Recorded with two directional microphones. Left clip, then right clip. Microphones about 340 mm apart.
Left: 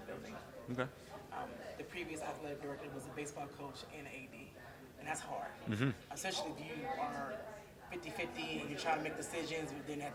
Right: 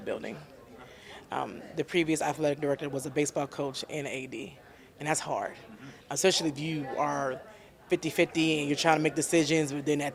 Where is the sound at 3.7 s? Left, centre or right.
Right.